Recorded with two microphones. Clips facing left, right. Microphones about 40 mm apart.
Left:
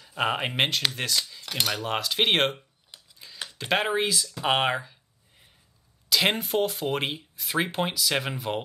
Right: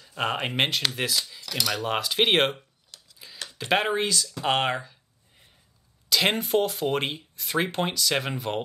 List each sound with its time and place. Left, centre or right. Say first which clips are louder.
0.0 s speech: left 1 dB; centre
2.9 s a sound: even; left
3.4 s speech: right 1 dB; centre
6.0 s speech: even; centre